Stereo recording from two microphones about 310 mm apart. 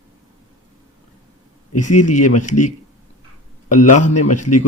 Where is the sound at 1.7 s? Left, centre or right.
Left.